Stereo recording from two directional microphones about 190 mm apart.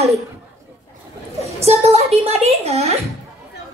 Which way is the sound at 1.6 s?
35° right (ahead or behind).